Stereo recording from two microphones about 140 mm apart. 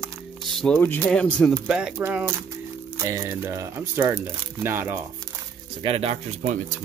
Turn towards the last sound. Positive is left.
turn(degrees=-50)  # may be behind; listen again after turning